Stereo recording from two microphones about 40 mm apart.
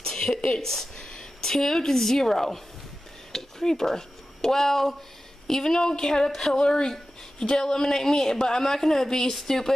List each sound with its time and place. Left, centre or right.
0.0 s a woman's voice: centre
0.9 s a sound: left
1.4 s speech: centre